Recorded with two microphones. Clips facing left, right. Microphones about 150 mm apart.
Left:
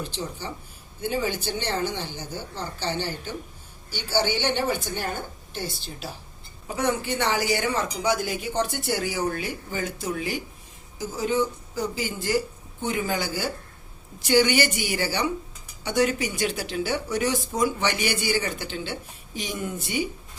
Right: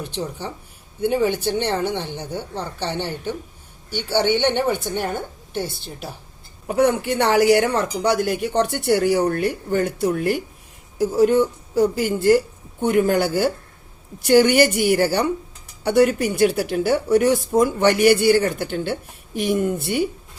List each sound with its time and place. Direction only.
0.0 s speech: 60° right (ahead or behind)